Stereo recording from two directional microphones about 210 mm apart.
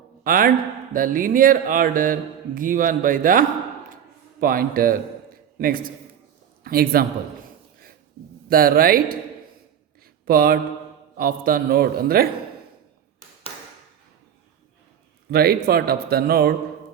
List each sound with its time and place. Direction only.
0.3 s speech: 40° right (ahead or behind)
8.4 s speech: 45° right (ahead or behind)
10.2 s speech: 45° right (ahead or behind)
15.3 s speech: 50° right (ahead or behind)